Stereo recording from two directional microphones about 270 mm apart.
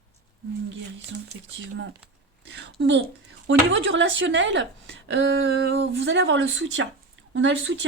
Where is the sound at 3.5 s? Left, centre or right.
Right.